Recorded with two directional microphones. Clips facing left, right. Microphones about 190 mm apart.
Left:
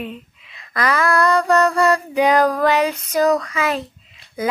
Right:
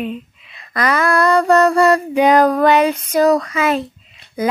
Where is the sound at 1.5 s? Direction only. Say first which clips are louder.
Right 5 dB; 25° right (ahead or behind).